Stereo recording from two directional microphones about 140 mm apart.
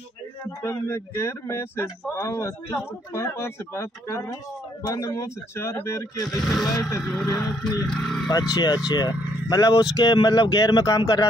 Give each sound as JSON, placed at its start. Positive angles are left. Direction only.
{"t": 0.5, "sound": "speech", "side_deg": 20}
{"t": 6.4, "sound": "speech", "side_deg": 0}
{"t": 6.7, "sound": "speech", "side_deg": 25}
{"t": 7.0, "sound": "speech", "side_deg": 0}
{"t": 7.4, "sound": "speech", "side_deg": 25}
{"t": 7.9, "sound": "speech", "side_deg": 5}
{"t": 8.3, "sound": "speech", "side_deg": 30}